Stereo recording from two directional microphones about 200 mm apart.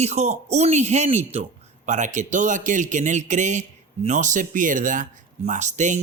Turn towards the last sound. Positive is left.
turn(degrees=-35)  # may be behind; listen again after turning